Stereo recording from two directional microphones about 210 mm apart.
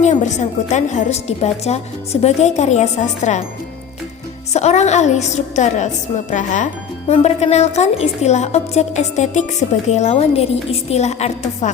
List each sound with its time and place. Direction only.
0.0 s a woman's voice: 35° left (ahead or behind)
4.5 s a woman's voice: 30° left (ahead or behind)